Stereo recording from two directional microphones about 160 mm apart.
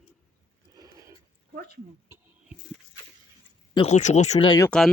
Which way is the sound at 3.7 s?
45° left (ahead or behind).